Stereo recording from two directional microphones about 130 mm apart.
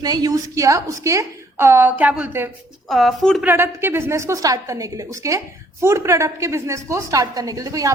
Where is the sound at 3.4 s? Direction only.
15° right (ahead or behind).